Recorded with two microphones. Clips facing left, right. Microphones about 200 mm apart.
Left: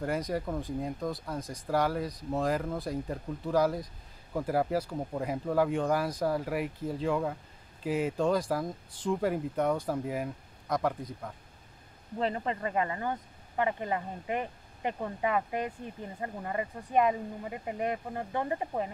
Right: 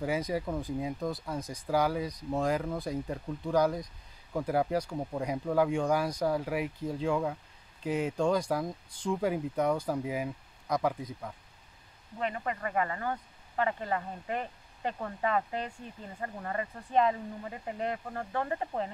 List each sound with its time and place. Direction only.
0.0 s speech: centre (ahead or behind)
12.2 s speech: 30° left (ahead or behind)